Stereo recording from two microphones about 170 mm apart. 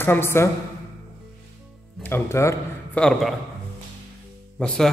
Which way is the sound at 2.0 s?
15° left (ahead or behind).